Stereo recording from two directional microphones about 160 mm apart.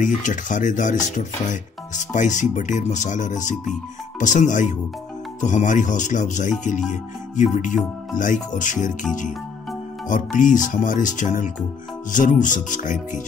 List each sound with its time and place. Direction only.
0.0 s speech: 50° left (ahead or behind)
10.0 s speech: 55° left (ahead or behind)